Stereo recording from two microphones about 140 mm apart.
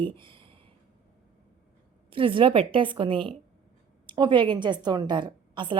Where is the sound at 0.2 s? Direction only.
35° right (ahead or behind).